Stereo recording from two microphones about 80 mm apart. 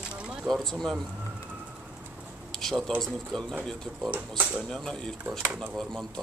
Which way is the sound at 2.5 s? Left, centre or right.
Centre.